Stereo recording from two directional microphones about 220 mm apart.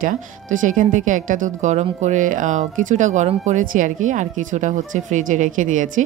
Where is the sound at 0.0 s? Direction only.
35° right (ahead or behind).